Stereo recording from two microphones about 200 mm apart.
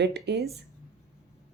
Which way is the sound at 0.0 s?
55° right (ahead or behind).